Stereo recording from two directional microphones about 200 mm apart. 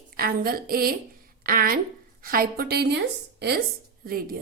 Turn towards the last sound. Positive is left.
turn(degrees=-45)  # may be behind; listen again after turning